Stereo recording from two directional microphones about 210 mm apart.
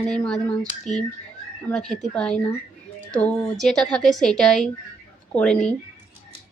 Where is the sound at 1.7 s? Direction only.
Centre (ahead or behind).